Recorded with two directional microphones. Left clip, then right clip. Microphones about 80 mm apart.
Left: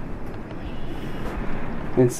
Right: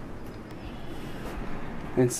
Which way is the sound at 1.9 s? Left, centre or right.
Right.